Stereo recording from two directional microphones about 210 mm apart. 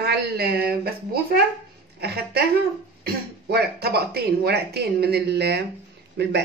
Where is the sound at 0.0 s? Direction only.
50° right (ahead or behind).